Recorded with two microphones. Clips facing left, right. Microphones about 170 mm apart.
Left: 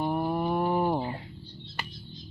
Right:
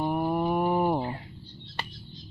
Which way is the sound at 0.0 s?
10° right (ahead or behind).